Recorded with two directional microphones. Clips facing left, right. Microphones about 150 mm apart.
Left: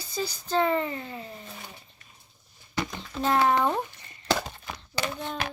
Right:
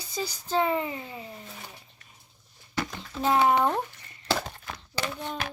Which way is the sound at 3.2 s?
10° right (ahead or behind).